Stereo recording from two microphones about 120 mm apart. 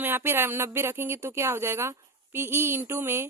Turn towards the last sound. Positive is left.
turn(degrees=-20)  # may be behind; listen again after turning